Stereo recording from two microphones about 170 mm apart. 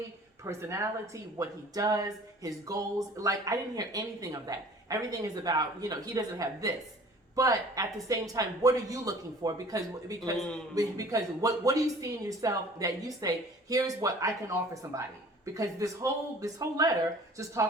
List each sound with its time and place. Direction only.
0.4 s speech: 15° right (ahead or behind)